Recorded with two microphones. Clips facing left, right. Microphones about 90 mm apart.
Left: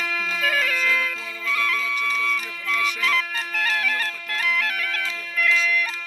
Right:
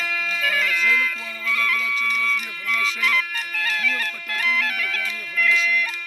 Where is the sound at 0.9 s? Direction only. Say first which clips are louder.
Right 2 dB; 25° left (ahead or behind).